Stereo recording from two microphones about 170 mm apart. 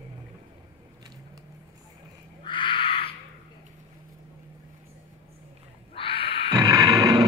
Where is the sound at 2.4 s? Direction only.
30° left (ahead or behind).